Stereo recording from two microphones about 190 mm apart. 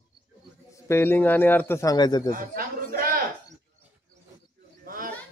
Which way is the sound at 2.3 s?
50° right (ahead or behind).